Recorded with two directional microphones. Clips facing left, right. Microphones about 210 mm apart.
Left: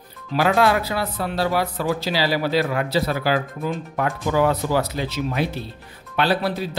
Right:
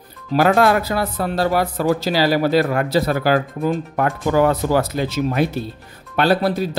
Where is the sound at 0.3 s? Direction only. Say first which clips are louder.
Right 4 dB; 50° right (ahead or behind).